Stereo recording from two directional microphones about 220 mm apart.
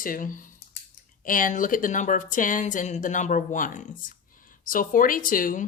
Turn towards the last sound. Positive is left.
turn(degrees=40)  # may be behind; listen again after turning